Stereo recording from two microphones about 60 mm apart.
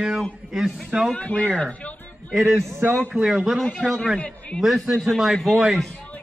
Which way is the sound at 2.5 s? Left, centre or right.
Right.